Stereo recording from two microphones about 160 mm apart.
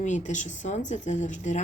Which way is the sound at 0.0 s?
50° left (ahead or behind).